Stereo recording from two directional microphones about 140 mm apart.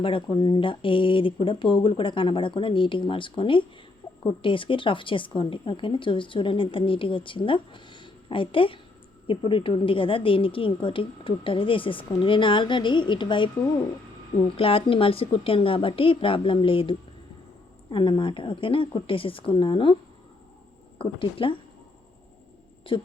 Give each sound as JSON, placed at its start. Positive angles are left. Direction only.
{"t": 0.0, "sound": "a woman's voice", "side_deg": 35}
{"t": 14.5, "sound": "a woman's voice", "side_deg": 40}
{"t": 17.9, "sound": "a woman's voice", "side_deg": 35}
{"t": 21.0, "sound": "a woman's voice", "side_deg": 40}
{"t": 22.9, "sound": "a woman's voice", "side_deg": 35}